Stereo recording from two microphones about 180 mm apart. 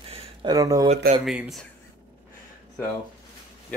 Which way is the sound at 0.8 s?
40° right (ahead or behind).